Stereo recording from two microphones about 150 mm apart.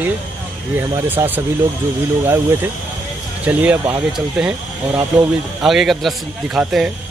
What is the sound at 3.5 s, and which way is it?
Speech, 15° right (ahead or behind).